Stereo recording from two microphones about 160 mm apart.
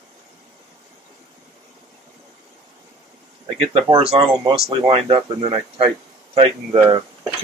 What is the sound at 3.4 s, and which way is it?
Speech, 35° right (ahead or behind).